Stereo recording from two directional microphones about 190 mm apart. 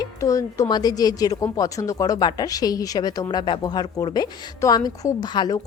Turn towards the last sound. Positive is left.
turn(degrees=20)  # may be behind; listen again after turning